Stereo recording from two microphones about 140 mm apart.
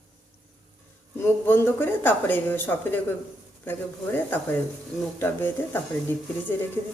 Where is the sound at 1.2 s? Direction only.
15° left (ahead or behind).